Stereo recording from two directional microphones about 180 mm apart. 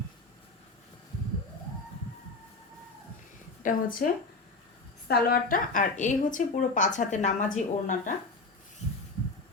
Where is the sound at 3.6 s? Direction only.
50° left (ahead or behind).